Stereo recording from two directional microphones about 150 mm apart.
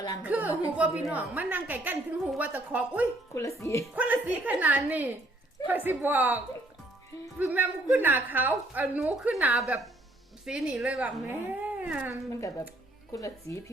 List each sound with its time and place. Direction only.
0.2 s a woman's voice: 10° right (ahead or behind)
3.3 s speech: 20° left (ahead or behind)
3.9 s a woman's voice: 10° right (ahead or behind)
9.6 s a woman's voice: centre (ahead or behind)
12.3 s speech: 20° left (ahead or behind)